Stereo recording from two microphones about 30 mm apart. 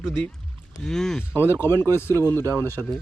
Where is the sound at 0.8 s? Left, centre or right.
Centre.